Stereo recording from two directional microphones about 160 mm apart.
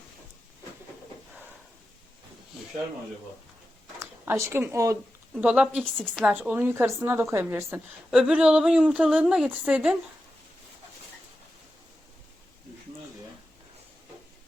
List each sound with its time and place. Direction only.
4.0 s speech: 15° right (ahead or behind)
5.4 s a woman's voice: 5° right (ahead or behind)
5.8 s a woman's voice: 5° left (ahead or behind)
6.2 s a woman's voice: 10° right (ahead or behind)